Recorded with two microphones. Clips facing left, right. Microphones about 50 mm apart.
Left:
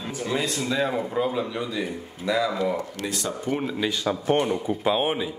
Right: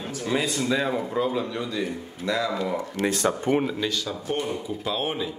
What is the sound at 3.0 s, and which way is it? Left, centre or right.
Speech, right.